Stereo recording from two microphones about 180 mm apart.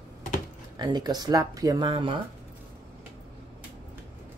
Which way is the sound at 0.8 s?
25° right (ahead or behind).